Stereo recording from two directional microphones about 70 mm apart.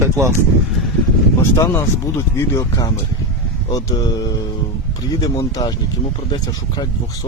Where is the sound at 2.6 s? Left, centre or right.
Left.